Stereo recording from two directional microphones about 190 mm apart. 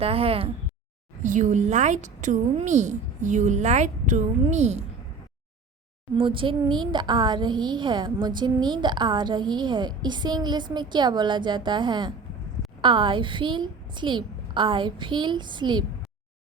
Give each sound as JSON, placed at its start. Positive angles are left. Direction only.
{"t": 0.0, "sound": "a woman's voice", "side_deg": -30}
{"t": 1.2, "sound": "a woman's voice", "side_deg": -40}
{"t": 6.1, "sound": "a woman's voice", "side_deg": -25}